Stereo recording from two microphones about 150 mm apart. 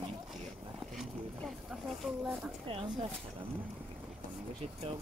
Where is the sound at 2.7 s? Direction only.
40° right (ahead or behind).